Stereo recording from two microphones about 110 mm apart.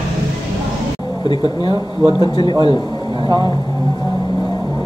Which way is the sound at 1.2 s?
45° left (ahead or behind).